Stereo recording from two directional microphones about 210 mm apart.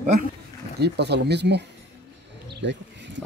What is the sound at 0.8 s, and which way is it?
Speech, 55° right (ahead or behind).